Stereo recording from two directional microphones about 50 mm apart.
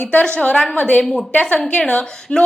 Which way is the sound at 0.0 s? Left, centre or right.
Left.